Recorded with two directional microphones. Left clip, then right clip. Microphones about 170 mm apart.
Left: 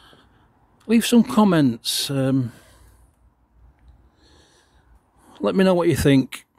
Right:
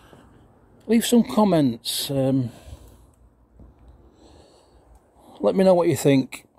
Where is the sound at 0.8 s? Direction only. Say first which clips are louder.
Left 1 dB; 35° left (ahead or behind); by 3.0 s 15° left (ahead or behind).